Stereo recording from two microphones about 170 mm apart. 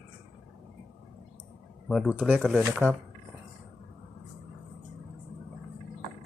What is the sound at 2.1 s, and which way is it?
Speech, 10° right (ahead or behind).